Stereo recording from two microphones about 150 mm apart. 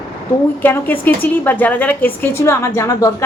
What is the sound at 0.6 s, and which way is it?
A woman's voice, 10° left (ahead or behind).